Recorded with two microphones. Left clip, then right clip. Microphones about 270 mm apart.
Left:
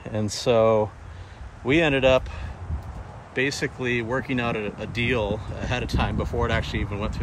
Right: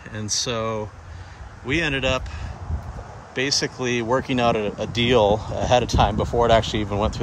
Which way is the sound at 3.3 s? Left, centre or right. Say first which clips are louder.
Right 2 dB; centre.